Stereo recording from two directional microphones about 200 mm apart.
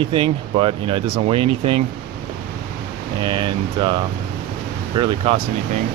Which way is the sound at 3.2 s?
25° right (ahead or behind).